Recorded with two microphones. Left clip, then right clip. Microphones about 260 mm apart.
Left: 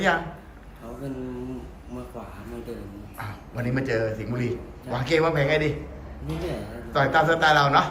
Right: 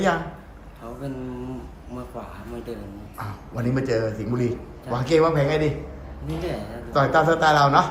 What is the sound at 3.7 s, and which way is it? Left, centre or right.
Speech, centre.